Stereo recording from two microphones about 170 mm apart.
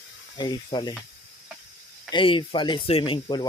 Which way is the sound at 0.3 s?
25° left (ahead or behind).